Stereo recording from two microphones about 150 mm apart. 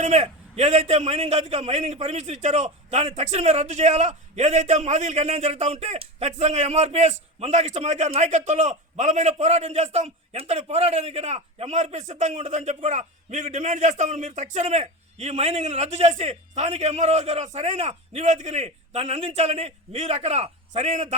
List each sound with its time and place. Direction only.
0.0 s a man's voice: 45° right (ahead or behind)